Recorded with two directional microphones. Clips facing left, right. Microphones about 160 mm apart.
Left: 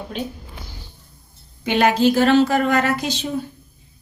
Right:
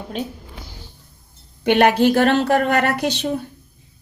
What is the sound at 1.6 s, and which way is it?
Speech, 65° right (ahead or behind).